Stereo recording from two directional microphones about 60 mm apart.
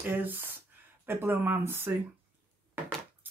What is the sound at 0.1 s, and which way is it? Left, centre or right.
Speech, right.